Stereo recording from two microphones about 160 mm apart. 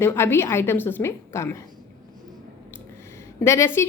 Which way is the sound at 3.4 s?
15° left (ahead or behind).